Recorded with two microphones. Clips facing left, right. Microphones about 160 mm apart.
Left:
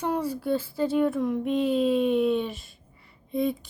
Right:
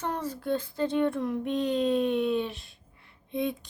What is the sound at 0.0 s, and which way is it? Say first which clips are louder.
Speech: left 5 dB; 10° left (ahead or behind).